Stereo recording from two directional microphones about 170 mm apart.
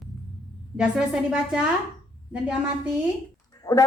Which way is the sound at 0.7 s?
5° right (ahead or behind).